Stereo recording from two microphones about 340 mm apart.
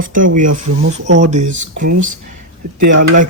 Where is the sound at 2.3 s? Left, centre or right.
Right.